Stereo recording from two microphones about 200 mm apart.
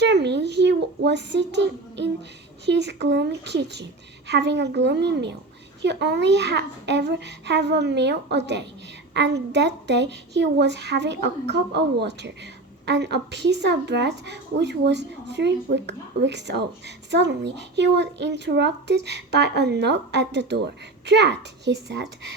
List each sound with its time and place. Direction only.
0.0 s child singing: 60° right (ahead or behind)
2.6 s a woman's voice: 60° right (ahead or behind)